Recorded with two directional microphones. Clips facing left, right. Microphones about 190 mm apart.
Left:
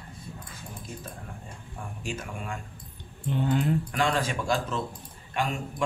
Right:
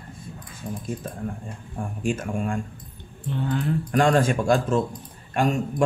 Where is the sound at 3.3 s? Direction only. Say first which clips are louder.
Even; 20° left (ahead or behind).